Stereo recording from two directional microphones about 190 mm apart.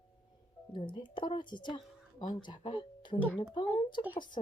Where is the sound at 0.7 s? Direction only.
25° left (ahead or behind).